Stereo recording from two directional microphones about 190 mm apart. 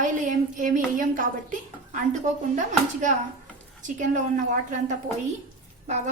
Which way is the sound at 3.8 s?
40° right (ahead or behind).